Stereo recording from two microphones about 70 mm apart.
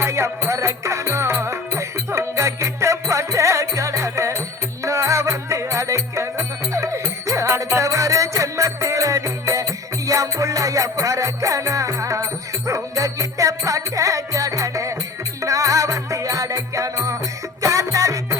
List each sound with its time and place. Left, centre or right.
0.0 s music: right